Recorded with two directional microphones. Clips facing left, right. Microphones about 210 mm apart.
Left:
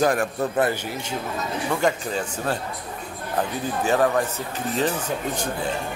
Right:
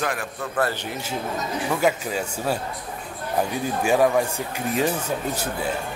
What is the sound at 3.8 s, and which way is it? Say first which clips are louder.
Speech: right 1 dB; 10° right (ahead or behind).